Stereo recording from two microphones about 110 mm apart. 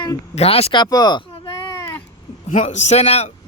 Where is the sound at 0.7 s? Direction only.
40° left (ahead or behind).